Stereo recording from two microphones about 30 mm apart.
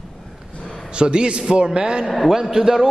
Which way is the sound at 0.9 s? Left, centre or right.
Right.